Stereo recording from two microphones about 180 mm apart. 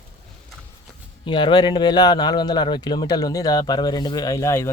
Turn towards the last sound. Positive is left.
turn(degrees=15)  # may be behind; listen again after turning